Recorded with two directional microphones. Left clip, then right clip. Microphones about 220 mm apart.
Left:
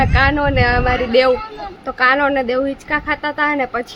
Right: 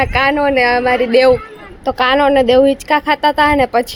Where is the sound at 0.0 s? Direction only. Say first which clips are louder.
Right 2 dB; 20° right (ahead or behind).